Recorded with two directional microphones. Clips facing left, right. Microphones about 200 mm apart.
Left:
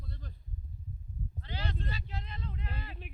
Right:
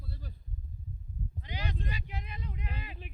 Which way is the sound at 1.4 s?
15° right (ahead or behind).